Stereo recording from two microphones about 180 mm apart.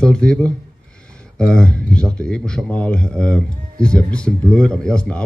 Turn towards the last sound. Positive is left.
turn(degrees=5)  # may be behind; listen again after turning